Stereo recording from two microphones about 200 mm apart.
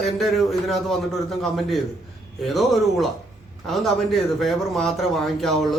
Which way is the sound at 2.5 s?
Centre (ahead or behind).